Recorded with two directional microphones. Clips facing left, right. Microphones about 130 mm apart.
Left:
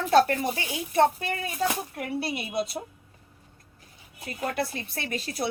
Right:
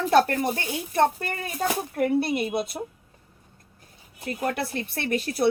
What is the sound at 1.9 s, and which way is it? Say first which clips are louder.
Speech: right 8 dB; 50° right (ahead or behind).